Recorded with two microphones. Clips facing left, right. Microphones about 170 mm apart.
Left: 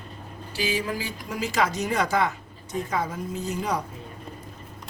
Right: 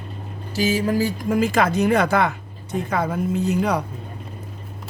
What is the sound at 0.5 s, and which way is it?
Speech, 40° right (ahead or behind).